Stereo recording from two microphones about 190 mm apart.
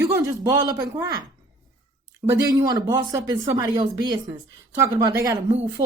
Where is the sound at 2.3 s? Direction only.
20° right (ahead or behind).